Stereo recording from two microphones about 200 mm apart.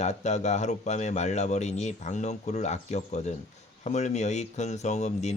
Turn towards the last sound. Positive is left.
turn(degrees=35)  # may be behind; listen again after turning